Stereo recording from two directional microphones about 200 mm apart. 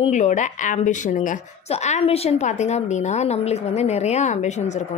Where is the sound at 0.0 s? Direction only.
35° left (ahead or behind).